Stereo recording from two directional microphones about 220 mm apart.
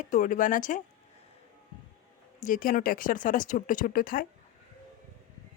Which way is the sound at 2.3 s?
35° left (ahead or behind).